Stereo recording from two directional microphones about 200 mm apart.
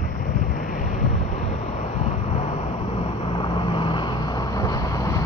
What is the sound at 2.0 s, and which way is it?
Vehicle, 35° left (ahead or behind).